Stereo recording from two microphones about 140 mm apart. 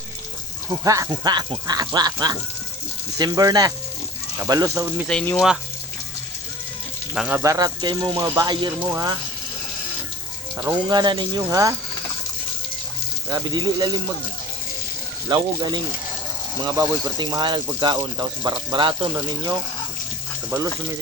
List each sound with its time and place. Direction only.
0.9 s speech: 25° right (ahead or behind)
5.0 s speech: 10° left (ahead or behind)
7.3 s speech: 20° right (ahead or behind)
10.6 s speech: 30° right (ahead or behind)
13.2 s speech: 30° right (ahead or behind)
15.3 s speech: 30° right (ahead or behind)